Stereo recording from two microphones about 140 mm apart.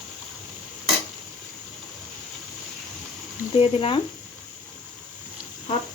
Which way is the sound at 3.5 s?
40° left (ahead or behind).